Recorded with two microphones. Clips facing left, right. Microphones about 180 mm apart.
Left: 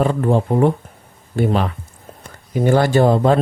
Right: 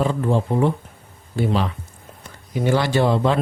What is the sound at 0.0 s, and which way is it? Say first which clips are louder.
Speech: left 4 dB; 55° left (ahead or behind).